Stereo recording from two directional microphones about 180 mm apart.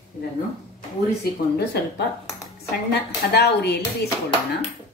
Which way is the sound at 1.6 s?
65° left (ahead or behind).